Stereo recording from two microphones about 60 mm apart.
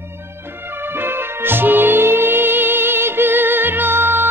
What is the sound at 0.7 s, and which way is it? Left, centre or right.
Music, right.